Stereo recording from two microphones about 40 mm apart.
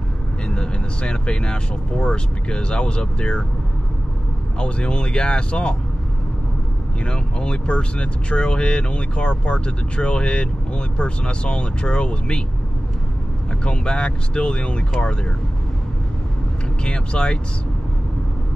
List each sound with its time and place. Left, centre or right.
0.5 s speech: left
4.6 s speech: left
7.1 s speech: left
13.7 s speech: left
16.8 s speech: left